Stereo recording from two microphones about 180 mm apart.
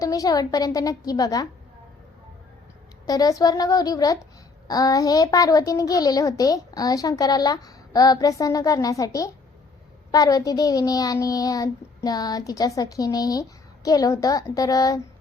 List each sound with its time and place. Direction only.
0.0 s a child's voice: 20° left (ahead or behind)
3.1 s a child's voice: 20° left (ahead or behind)